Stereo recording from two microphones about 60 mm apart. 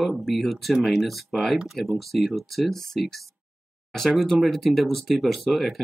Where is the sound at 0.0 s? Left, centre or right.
Centre.